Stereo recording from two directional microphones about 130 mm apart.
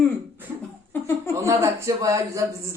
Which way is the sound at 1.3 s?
25° right (ahead or behind).